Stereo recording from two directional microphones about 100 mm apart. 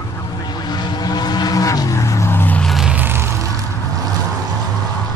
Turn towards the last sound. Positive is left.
turn(degrees=-20)  # may be behind; listen again after turning